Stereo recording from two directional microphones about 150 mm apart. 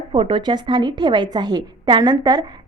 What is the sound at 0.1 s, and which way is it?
A woman's voice, 35° right (ahead or behind).